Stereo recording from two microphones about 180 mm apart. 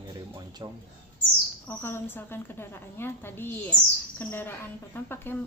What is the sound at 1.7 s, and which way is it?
Speech, 10° left (ahead or behind).